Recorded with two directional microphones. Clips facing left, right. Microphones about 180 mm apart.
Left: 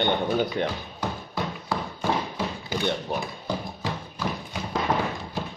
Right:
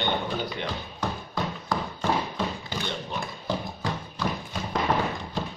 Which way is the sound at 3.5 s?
10° left (ahead or behind).